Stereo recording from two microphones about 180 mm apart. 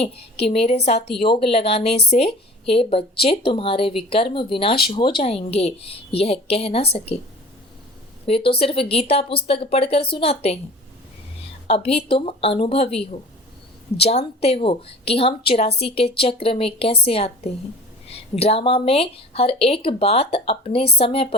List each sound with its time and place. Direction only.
0.0 s a woman's voice: 35° left (ahead or behind)
8.3 s a woman's voice: 30° left (ahead or behind)
11.7 s a woman's voice: 35° left (ahead or behind)